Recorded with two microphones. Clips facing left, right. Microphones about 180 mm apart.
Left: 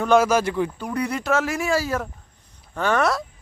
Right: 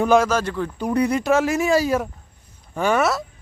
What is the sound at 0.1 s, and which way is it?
Speech, 10° left (ahead or behind).